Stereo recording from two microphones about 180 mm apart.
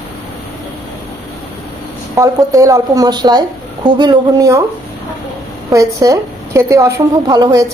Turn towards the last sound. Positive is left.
turn(degrees=-20)  # may be behind; listen again after turning